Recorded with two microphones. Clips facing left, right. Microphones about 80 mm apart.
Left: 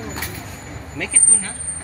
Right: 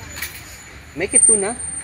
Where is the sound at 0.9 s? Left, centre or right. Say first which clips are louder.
Right 9 dB; centre.